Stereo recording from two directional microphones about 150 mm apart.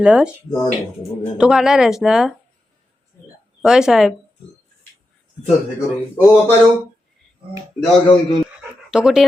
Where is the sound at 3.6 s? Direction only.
5° right (ahead or behind).